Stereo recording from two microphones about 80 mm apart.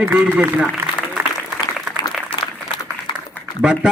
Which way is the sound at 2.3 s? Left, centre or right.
Left.